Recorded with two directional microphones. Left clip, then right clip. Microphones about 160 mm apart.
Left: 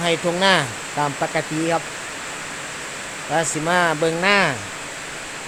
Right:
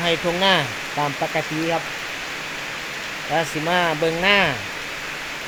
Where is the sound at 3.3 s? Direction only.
10° left (ahead or behind).